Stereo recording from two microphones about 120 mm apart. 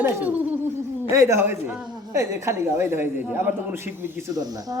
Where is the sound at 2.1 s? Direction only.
25° right (ahead or behind).